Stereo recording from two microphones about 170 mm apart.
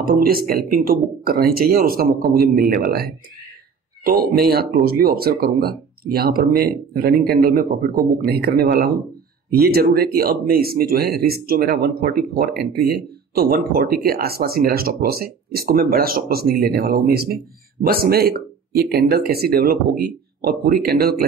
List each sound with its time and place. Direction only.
0.0 s speech: 60° right (ahead or behind)